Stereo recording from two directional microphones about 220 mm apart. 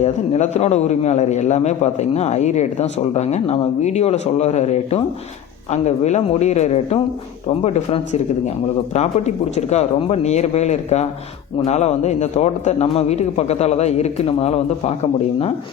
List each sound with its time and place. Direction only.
0.0 s a man's voice: 30° left (ahead or behind)